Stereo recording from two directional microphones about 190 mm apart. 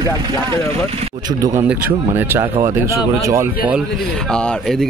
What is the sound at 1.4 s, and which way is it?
Speech, 15° right (ahead or behind).